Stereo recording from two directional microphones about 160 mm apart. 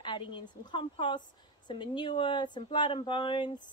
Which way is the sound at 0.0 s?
30° left (ahead or behind).